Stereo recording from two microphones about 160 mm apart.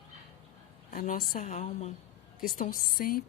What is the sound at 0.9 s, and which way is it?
Speech, 60° left (ahead or behind).